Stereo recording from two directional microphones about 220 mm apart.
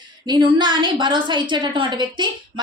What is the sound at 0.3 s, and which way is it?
A woman's voice, 20° right (ahead or behind).